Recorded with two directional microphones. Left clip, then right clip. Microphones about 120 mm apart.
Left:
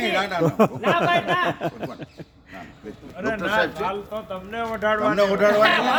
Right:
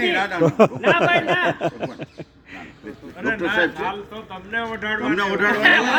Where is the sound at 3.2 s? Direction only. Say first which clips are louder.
Right 2 dB; 40° left (ahead or behind).